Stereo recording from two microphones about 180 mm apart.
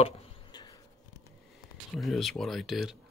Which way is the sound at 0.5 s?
20° left (ahead or behind).